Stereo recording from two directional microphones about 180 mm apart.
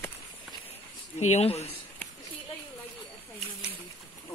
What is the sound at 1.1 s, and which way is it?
Speech, 35° left (ahead or behind).